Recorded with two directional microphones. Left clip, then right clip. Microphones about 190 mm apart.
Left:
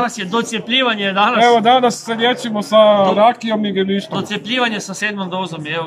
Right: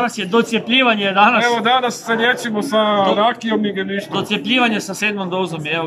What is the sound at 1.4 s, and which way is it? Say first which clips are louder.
A man's voice: left 4 dB; 30° left (ahead or behind).